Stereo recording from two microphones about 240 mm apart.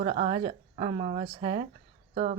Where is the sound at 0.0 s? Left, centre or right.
Right.